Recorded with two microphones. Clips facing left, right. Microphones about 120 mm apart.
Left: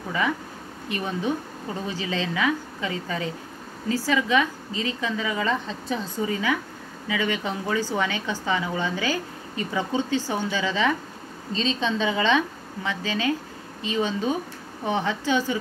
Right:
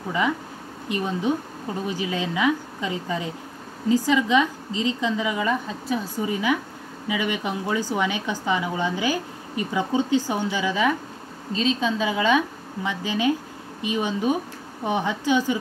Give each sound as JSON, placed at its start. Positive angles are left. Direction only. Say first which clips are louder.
{"t": 0.8, "sound": "a woman's voice", "louder": "right 3 dB", "side_deg": -20}